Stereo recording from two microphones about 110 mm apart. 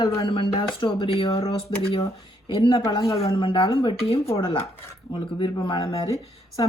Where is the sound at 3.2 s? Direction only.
55° left (ahead or behind).